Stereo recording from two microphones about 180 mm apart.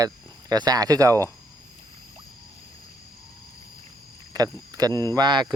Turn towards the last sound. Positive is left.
turn(degrees=-25)  # may be behind; listen again after turning